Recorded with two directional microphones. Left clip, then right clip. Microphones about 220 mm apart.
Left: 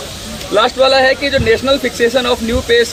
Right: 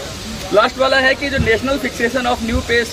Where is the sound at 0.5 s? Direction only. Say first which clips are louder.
Left 3 dB; 40° left (ahead or behind).